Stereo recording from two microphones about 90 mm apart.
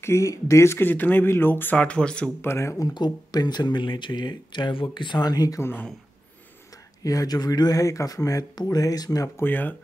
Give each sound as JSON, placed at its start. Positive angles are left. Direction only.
{"t": 0.0, "sound": "speech", "side_deg": 35}
{"t": 2.4, "sound": "speech", "side_deg": 30}
{"t": 2.9, "sound": "speech", "side_deg": 50}
{"t": 5.6, "sound": "speech", "side_deg": 25}
{"t": 7.0, "sound": "speech", "side_deg": 40}
{"t": 9.4, "sound": "speech", "side_deg": 20}